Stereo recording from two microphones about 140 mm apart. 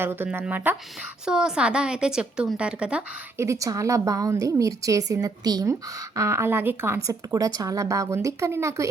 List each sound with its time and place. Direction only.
0.0 s a woman's voice: 15° right (ahead or behind)
3.3 s speech: 20° right (ahead or behind)